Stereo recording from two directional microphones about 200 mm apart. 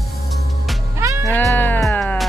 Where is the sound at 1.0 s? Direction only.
15° right (ahead or behind).